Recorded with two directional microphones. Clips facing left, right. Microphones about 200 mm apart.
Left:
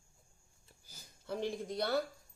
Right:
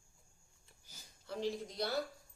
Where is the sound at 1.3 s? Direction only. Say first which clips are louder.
Left 2 dB; 55° left (ahead or behind).